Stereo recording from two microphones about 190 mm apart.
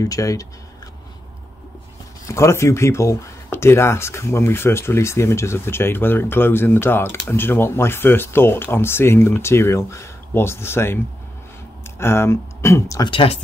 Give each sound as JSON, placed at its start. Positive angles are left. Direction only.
{"t": 0.0, "sound": "speech", "side_deg": 15}
{"t": 2.2, "sound": "speech", "side_deg": 15}
{"t": 12.0, "sound": "speech", "side_deg": 15}
{"t": 13.1, "sound": "speech", "side_deg": 30}